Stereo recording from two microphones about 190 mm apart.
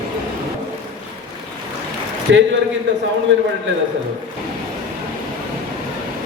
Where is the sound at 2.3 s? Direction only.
75° right (ahead or behind).